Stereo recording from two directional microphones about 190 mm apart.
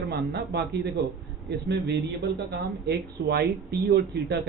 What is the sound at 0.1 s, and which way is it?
Speech, 60° right (ahead or behind).